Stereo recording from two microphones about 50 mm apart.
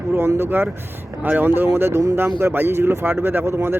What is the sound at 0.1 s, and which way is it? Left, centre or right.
Speech, right.